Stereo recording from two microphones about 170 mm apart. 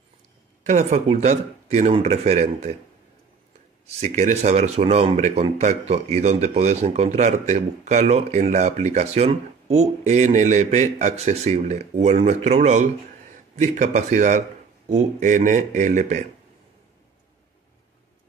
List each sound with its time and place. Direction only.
0.7 s speech: 40° right (ahead or behind)
3.8 s speech: 40° right (ahead or behind)